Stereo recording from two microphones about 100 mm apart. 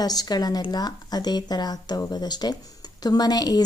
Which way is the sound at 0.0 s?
40° left (ahead or behind).